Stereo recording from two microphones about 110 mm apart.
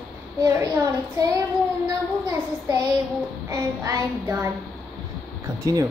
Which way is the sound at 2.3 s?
25° right (ahead or behind).